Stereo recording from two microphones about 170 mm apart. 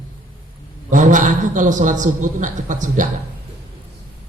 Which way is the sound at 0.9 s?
50° right (ahead or behind).